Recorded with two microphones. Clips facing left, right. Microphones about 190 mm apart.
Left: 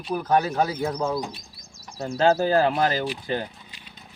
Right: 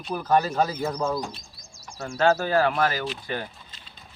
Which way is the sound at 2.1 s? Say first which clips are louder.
Left 2 dB; 35° left (ahead or behind).